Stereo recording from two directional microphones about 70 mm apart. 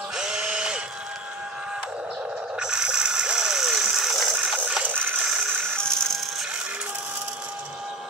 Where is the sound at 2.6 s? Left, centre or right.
Centre.